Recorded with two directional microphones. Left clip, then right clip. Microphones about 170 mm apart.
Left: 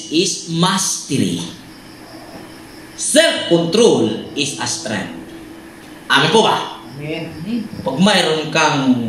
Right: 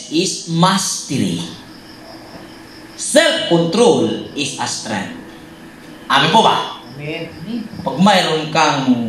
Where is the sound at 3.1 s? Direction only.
35° left (ahead or behind).